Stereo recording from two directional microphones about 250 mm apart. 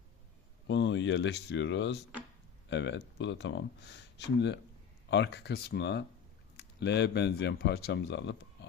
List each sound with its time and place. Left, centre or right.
0.7 s speech: left